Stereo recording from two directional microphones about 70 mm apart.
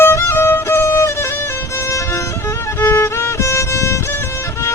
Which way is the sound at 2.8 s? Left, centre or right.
Left.